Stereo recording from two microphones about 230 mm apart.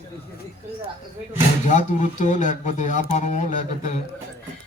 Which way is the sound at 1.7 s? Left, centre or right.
Left.